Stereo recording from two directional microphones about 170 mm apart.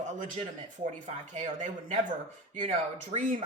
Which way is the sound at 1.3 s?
45° right (ahead or behind).